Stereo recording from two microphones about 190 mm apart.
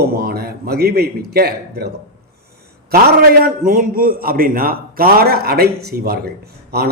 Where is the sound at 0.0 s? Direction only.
55° right (ahead or behind).